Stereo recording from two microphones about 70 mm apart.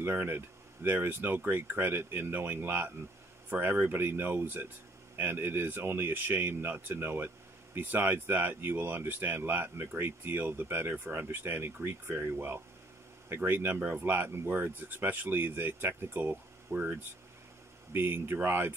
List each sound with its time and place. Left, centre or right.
0.0 s speech: right